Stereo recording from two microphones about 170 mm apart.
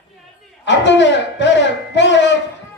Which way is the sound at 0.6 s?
90° left.